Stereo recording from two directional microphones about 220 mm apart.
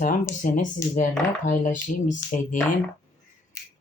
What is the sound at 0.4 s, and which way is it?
Speech, 35° left (ahead or behind).